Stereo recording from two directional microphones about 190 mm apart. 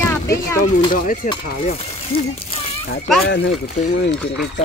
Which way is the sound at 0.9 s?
45° left (ahead or behind).